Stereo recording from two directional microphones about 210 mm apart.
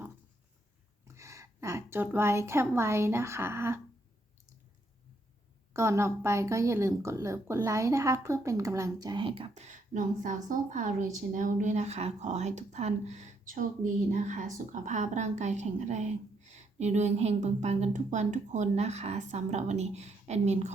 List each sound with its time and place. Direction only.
1.0 s a woman's voice: 15° right (ahead or behind)
5.7 s a woman's voice: 15° right (ahead or behind); by 20.7 s 35° right (ahead or behind)